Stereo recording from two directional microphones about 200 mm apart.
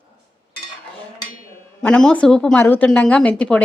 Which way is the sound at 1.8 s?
5° left (ahead or behind).